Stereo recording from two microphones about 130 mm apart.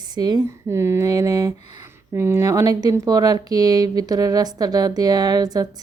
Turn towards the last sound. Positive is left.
turn(degrees=-30)  # may be behind; listen again after turning